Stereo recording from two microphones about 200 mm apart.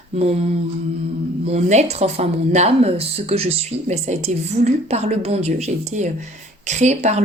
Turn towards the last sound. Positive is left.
turn(degrees=-35)  # may be behind; listen again after turning